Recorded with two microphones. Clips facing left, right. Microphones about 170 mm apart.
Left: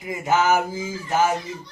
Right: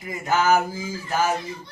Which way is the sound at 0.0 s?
20° left (ahead or behind).